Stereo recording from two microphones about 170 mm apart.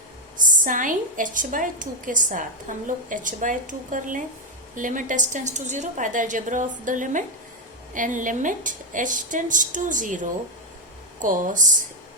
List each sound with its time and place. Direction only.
0.3 s a woman's voice: 50° right (ahead or behind)